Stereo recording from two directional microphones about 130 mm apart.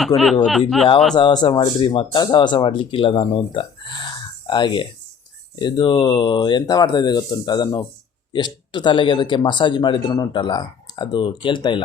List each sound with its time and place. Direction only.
0.2 s speech: centre (ahead or behind)
1.2 s speech: 35° left (ahead or behind)